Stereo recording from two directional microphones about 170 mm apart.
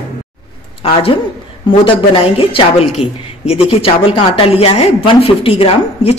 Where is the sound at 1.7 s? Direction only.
35° left (ahead or behind).